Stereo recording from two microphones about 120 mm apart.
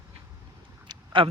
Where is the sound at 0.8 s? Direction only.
45° right (ahead or behind).